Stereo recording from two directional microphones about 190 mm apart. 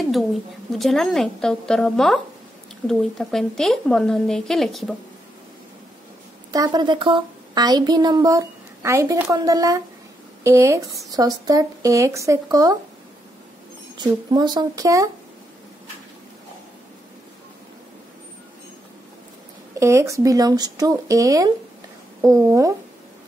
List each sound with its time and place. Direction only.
0.7 s a woman's voice: centre (ahead or behind)
6.5 s a woman's voice: 20° right (ahead or behind)
13.9 s a woman's voice: 20° right (ahead or behind)
19.8 s speech: 15° right (ahead or behind)